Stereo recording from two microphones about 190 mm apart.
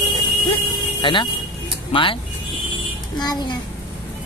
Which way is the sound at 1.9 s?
30° left (ahead or behind).